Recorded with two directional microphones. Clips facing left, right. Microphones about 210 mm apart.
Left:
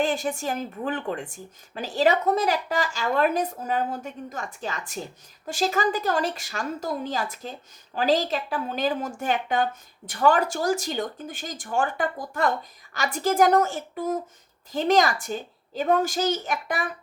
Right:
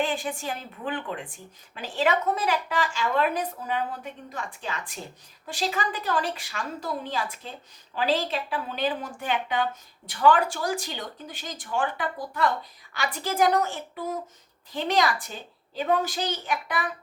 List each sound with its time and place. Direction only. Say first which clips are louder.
0.0 s a woman's voice: left 3 dB; 45° left (ahead or behind)